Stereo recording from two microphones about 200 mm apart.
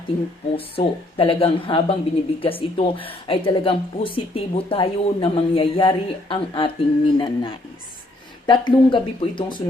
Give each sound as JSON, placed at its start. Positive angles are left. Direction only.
{"t": 0.5, "sound": "speech", "side_deg": 25}